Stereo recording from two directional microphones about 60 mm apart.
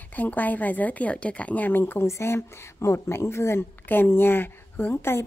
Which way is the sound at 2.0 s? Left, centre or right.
Left.